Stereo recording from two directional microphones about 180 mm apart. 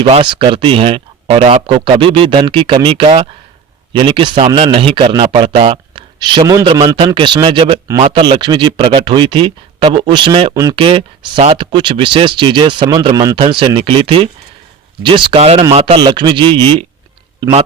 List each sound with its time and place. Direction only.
0.0 s a man's voice: 25° right (ahead or behind)
10.5 s speech: 15° right (ahead or behind)
10.8 s speech: 30° right (ahead or behind)